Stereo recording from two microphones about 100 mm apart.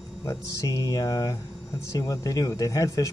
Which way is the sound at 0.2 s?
30° left (ahead or behind).